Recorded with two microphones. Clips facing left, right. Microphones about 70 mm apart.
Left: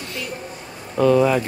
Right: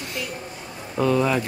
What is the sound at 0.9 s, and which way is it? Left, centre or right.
Speech, centre.